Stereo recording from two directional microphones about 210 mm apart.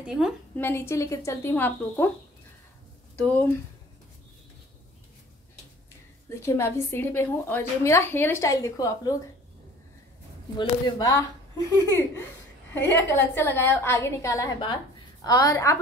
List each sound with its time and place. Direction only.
0.0 s a woman's voice: 5° right (ahead or behind)
0.6 s a woman's voice: 10° left (ahead or behind)
3.3 s a woman's voice: 10° left (ahead or behind)
6.4 s a woman's voice: 15° left (ahead or behind)
10.6 s a woman's voice: 20° left (ahead or behind)